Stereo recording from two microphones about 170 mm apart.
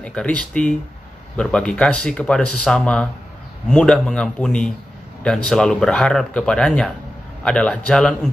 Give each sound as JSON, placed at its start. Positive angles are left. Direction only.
{"t": 0.0, "sound": "speech", "side_deg": 5}